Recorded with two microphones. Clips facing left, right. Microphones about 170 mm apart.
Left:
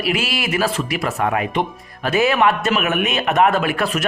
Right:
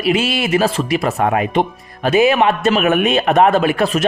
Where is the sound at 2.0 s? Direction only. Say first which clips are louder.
Right 4 dB; 20° right (ahead or behind).